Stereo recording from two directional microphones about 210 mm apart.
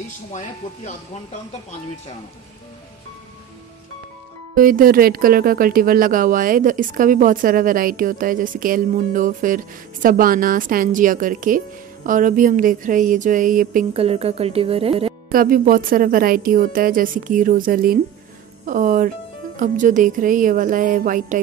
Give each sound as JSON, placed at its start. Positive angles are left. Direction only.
{"t": 0.3, "sound": "speech", "side_deg": 35}
{"t": 4.6, "sound": "speech", "side_deg": -40}
{"t": 13.9, "sound": "speech", "side_deg": -30}
{"t": 15.3, "sound": "speech", "side_deg": -40}